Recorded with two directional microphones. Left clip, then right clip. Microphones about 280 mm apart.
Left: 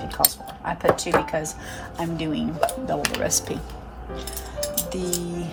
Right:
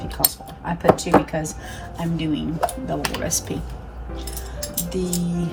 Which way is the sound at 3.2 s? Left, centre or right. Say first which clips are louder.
Left 1 dB; centre.